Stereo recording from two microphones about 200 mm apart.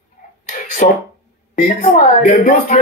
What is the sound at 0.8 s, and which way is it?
A man's voice, 40° left (ahead or behind).